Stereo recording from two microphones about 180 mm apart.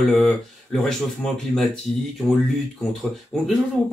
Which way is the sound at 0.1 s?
5° left (ahead or behind).